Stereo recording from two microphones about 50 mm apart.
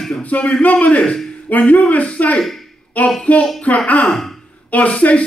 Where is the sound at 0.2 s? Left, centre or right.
Left.